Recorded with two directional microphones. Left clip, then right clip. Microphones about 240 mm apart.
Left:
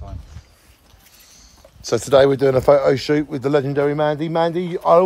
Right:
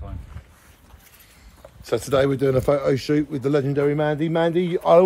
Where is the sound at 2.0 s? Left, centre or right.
Left.